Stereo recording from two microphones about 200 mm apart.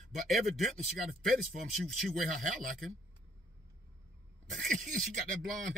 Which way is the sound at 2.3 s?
40° right (ahead or behind).